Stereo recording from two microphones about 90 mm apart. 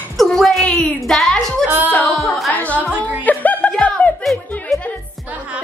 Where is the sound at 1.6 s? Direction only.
25° right (ahead or behind).